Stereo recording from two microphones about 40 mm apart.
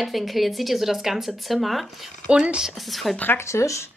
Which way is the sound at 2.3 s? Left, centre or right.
Right.